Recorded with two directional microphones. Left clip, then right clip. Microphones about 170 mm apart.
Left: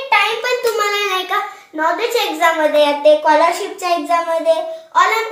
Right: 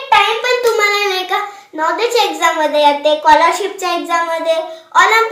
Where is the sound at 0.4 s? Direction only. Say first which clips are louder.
Right 4 dB; 30° right (ahead or behind).